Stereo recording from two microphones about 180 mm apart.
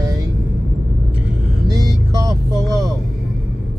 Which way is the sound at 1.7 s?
20° right (ahead or behind).